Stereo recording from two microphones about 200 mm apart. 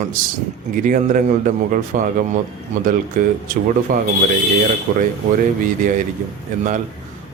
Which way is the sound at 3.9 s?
45° right (ahead or behind).